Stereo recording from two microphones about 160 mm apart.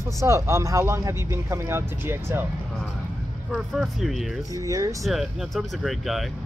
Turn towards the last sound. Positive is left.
turn(degrees=0)  # may be behind; listen again after turning